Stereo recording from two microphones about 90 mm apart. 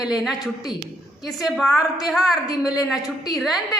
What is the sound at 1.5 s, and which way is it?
A woman's voice, centre (ahead or behind).